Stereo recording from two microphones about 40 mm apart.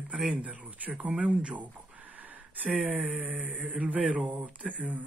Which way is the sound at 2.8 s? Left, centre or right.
Right.